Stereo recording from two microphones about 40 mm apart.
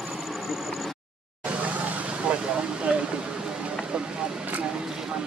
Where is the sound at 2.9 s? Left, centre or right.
Right.